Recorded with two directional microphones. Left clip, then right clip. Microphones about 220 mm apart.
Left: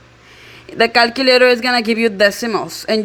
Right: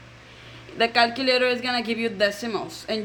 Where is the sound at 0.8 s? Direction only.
45° left (ahead or behind).